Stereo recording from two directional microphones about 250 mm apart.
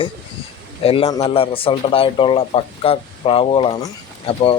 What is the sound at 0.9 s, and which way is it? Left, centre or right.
Speech, left.